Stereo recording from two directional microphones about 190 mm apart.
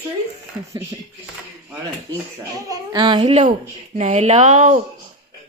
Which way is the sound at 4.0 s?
35° right (ahead or behind).